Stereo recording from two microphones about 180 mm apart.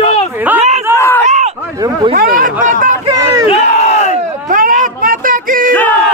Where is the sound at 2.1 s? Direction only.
50° right (ahead or behind).